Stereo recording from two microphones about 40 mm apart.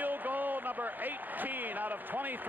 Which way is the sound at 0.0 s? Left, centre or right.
Right.